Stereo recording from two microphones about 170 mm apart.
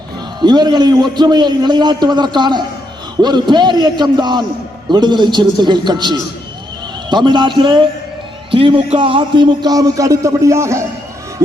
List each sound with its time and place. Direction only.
0.4 s a man's voice: 25° right (ahead or behind)